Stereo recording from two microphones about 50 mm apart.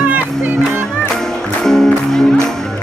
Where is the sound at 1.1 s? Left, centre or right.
Centre.